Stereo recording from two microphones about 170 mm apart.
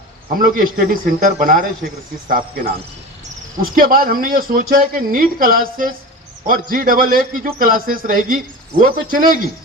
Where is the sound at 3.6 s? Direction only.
55° right (ahead or behind).